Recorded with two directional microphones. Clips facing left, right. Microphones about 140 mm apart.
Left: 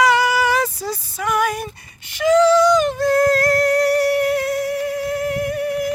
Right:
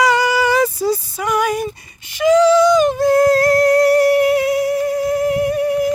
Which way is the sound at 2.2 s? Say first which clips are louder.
Right 2 dB; 15° right (ahead or behind).